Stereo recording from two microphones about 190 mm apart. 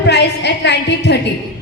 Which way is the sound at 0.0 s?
65° left (ahead or behind).